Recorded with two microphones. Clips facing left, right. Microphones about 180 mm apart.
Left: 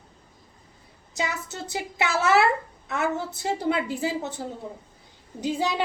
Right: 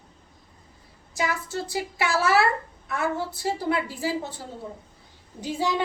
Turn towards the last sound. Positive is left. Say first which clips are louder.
# left 1 dB
turn(degrees=20)  # may be behind; listen again after turning